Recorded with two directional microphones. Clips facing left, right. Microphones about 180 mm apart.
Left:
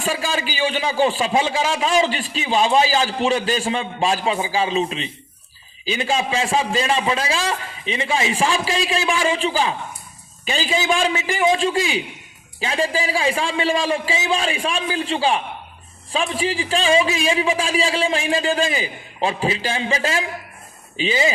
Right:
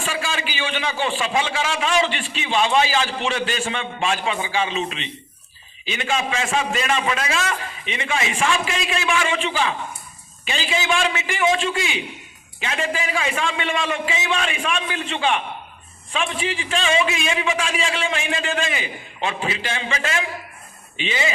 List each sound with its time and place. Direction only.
0.0 s a man's voice: 40° left (ahead or behind)